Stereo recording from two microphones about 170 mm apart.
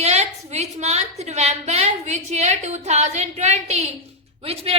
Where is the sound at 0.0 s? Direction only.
40° right (ahead or behind).